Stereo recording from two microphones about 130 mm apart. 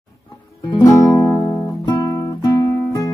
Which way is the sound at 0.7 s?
30° left (ahead or behind).